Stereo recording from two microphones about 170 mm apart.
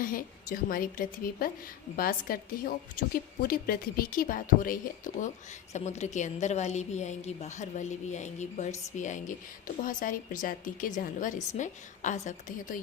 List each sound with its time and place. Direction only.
0.0 s a woman's voice: 55° left (ahead or behind)